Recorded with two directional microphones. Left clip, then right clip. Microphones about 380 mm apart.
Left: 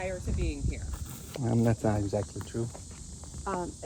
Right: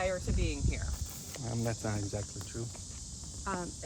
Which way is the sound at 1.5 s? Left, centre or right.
Left.